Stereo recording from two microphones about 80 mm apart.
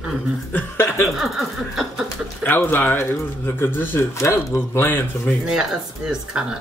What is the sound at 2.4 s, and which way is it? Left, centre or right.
Speech, left.